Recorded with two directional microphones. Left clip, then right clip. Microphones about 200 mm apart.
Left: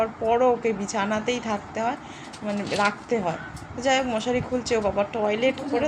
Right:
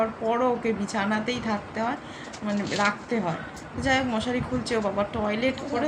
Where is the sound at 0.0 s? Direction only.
10° left (ahead or behind).